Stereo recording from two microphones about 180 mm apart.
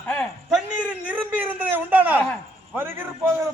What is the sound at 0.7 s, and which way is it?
A man's voice, 5° right (ahead or behind).